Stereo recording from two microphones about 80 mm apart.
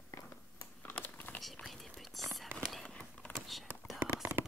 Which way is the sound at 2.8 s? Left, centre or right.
Centre.